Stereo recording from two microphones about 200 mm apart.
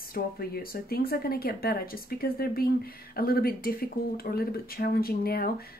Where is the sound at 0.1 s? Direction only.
50° left (ahead or behind).